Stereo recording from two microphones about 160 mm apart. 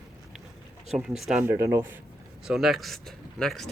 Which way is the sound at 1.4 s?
15° right (ahead or behind).